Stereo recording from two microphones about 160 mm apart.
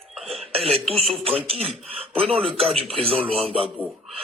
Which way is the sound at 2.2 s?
Centre (ahead or behind).